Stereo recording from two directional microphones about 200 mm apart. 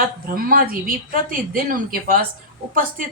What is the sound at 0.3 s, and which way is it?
A woman's voice, 45° right (ahead or behind).